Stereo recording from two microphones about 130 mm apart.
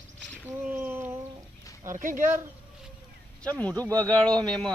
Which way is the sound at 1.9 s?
85° right.